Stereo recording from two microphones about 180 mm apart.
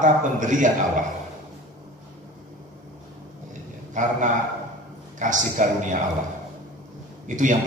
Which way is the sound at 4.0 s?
45° right (ahead or behind).